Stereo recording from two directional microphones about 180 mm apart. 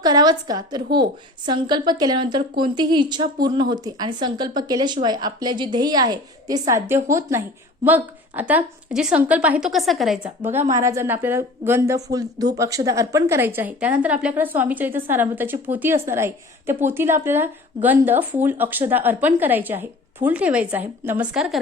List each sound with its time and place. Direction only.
0.0 s a woman's voice: 20° right (ahead or behind); by 10.2 s centre (ahead or behind)
10.4 s a woman's voice: 15° right (ahead or behind)